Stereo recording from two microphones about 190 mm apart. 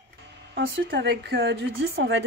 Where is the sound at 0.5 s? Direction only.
75° right (ahead or behind).